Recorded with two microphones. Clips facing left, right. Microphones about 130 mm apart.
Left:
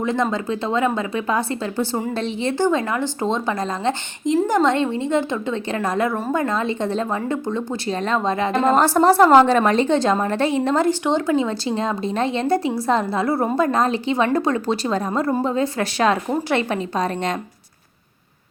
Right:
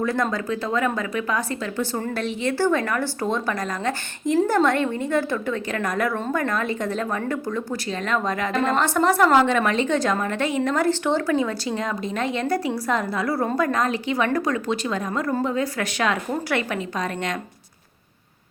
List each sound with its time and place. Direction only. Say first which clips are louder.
0.0 s a woman's voice: left 2 dB; 20° left (ahead or behind)
10.8 s a woman's voice: left 2 dB; 15° left (ahead or behind)